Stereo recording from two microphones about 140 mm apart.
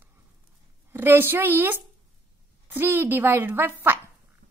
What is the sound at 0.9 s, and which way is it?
A woman's voice, 15° right (ahead or behind).